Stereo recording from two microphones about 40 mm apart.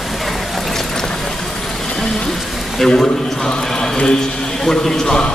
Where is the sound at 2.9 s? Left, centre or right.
Centre.